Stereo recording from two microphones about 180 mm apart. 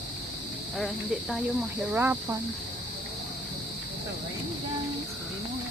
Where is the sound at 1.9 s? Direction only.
10° right (ahead or behind).